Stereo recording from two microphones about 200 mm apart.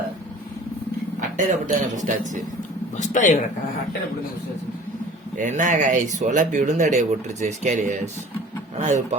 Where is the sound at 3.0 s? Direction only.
40° left (ahead or behind).